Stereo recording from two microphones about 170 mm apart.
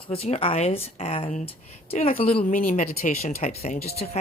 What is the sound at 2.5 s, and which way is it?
Speech, 55° left (ahead or behind).